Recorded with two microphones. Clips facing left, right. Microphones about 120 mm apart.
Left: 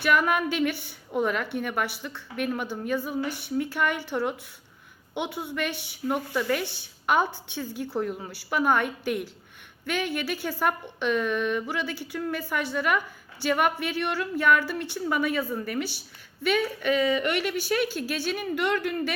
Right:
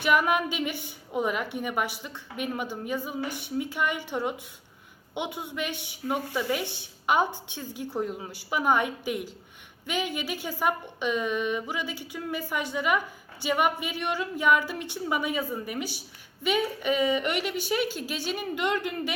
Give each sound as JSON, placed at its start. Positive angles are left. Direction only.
{"t": 0.0, "sound": "a woman's voice", "side_deg": -10}